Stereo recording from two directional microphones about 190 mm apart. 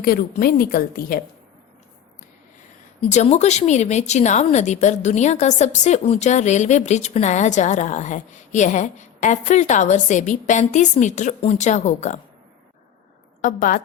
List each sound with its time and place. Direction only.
0.0 s a woman's voice: 50° left (ahead or behind)
3.0 s speech: 35° left (ahead or behind)
13.4 s a woman's voice: 45° left (ahead or behind)